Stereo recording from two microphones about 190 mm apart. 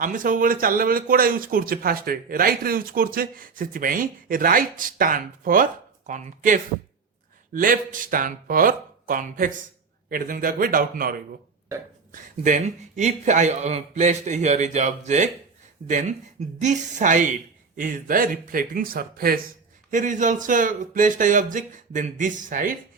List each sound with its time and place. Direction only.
0.0 s speech: 45° right (ahead or behind)
12.4 s a man's voice: 40° right (ahead or behind)